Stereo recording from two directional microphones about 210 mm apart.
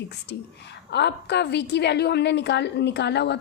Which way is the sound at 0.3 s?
55° left (ahead or behind).